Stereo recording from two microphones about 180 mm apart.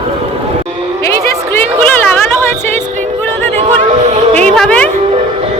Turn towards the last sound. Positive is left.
turn(degrees=5)  # may be behind; listen again after turning